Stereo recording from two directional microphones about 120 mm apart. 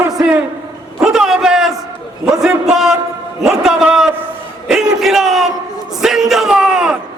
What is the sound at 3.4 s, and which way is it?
Speech, 5° right (ahead or behind).